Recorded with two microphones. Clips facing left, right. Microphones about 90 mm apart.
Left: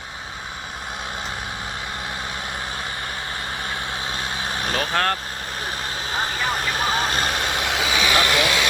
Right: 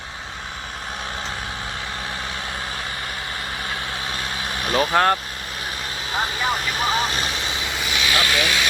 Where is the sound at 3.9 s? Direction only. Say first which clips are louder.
Even; 25° left (ahead or behind).